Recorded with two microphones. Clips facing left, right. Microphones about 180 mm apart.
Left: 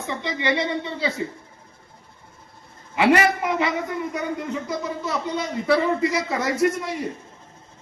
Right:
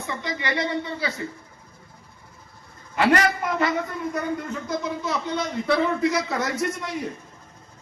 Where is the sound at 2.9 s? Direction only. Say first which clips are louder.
Left 2 dB; 10° left (ahead or behind).